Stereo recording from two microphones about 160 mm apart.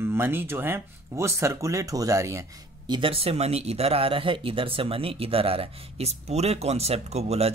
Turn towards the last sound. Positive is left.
turn(degrees=-40)  # may be behind; listen again after turning